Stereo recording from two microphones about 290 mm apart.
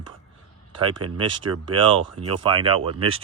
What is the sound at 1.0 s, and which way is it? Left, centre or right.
Speech, right.